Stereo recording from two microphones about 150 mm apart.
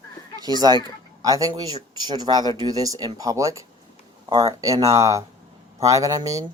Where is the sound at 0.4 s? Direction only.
25° right (ahead or behind).